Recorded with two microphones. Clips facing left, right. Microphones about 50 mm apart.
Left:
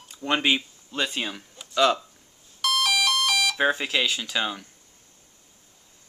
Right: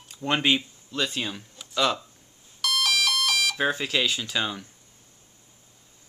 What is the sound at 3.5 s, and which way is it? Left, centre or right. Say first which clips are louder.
Speech: left 2 dB; centre.